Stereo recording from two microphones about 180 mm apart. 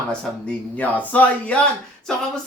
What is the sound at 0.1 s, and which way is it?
A man's voice, 5° left (ahead or behind).